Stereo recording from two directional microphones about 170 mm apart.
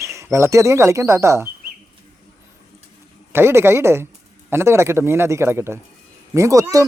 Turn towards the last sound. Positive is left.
turn(degrees=-20)  # may be behind; listen again after turning